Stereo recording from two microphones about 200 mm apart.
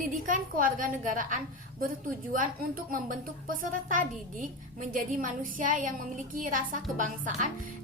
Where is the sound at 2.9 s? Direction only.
40° right (ahead or behind).